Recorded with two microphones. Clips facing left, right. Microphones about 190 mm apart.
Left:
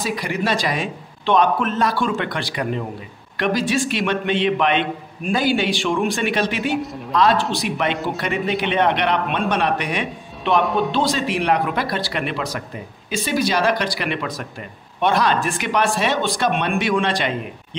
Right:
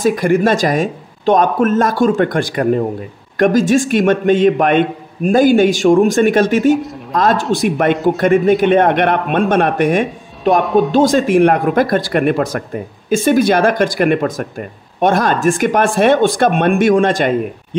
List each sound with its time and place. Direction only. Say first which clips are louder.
0.0 s speech: right 11 dB; 50° right (ahead or behind)
10.6 s speech: right 7 dB; centre (ahead or behind)
10.9 s speech: right 9 dB; 45° right (ahead or behind)